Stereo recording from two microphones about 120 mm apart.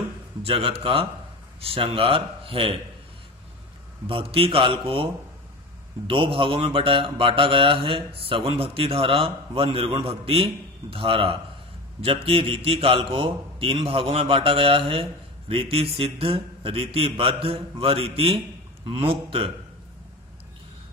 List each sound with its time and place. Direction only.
0.4 s a man's voice: 50° right (ahead or behind)
4.1 s a man's voice: 50° right (ahead or behind)